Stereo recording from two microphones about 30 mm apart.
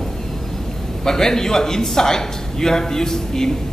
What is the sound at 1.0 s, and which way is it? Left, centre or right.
A man's voice, centre.